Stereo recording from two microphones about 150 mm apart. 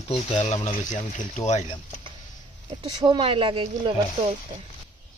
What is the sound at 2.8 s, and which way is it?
Speech, 35° right (ahead or behind).